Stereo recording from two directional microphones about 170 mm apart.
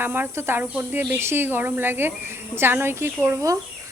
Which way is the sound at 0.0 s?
10° right (ahead or behind).